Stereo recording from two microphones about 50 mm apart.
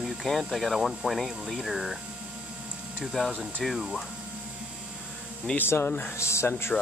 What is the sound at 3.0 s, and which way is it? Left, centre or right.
Speech, centre.